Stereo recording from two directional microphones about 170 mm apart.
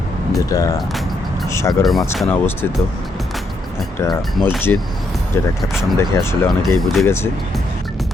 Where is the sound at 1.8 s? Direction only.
Centre (ahead or behind).